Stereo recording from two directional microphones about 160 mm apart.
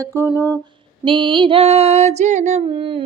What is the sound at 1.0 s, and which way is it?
Speech, 30° right (ahead or behind).